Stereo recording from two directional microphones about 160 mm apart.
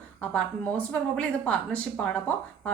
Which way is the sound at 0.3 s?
5° left (ahead or behind).